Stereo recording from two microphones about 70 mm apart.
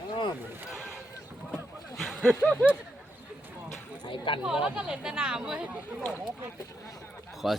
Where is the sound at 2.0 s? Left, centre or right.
Centre.